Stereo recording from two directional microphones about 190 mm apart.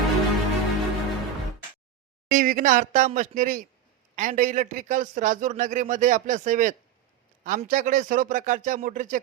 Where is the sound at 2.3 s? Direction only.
45° right (ahead or behind).